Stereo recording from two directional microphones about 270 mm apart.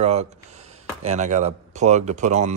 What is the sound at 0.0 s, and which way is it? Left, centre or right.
Speech, right.